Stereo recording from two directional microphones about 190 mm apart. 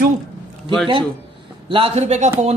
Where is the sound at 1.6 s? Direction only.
30° right (ahead or behind).